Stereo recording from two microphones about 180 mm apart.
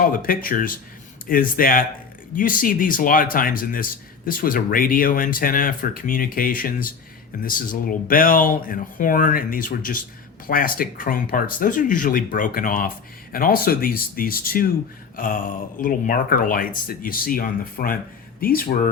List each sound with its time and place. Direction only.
0.0 s speech: 50° left (ahead or behind)